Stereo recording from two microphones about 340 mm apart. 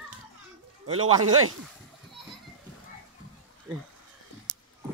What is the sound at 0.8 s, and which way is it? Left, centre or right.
Speech, right.